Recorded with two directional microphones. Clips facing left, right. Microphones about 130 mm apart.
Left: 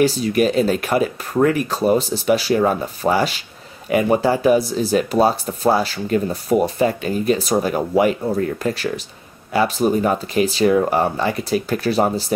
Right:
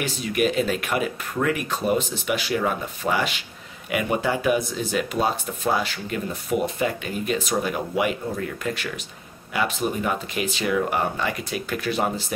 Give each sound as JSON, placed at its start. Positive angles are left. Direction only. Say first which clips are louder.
{"t": 0.0, "sound": "speech", "louder": "left 7 dB", "side_deg": 35}